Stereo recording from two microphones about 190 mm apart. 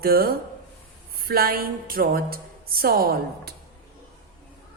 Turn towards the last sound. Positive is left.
turn(degrees=-55)  # may be behind; listen again after turning